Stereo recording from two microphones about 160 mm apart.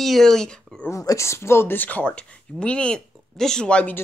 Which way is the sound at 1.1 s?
15° left (ahead or behind).